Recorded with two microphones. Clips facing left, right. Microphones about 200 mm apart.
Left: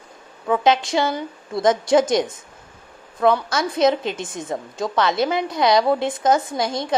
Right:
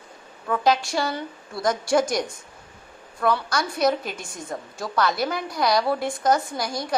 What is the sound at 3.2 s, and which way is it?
A woman's voice, 20° left (ahead or behind).